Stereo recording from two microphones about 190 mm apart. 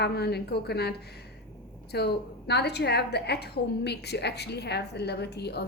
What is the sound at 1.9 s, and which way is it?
A woman's voice, 60° left (ahead or behind).